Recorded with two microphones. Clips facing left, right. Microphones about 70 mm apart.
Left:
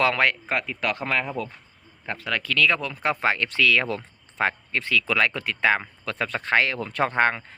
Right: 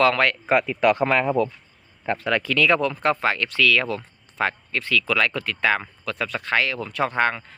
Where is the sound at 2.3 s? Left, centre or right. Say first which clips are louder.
Right 2 dB; centre.